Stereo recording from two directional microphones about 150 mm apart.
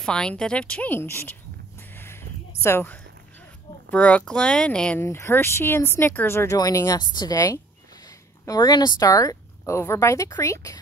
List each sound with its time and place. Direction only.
0.0 s speech: 5° left (ahead or behind)
2.6 s speech: 15° left (ahead or behind)